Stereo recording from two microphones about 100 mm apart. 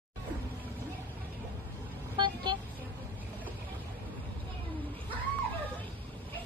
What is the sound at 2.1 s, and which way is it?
Vehicle, 50° right (ahead or behind).